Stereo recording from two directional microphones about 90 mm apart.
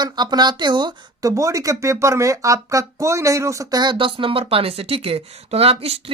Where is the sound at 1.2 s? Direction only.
40° right (ahead or behind).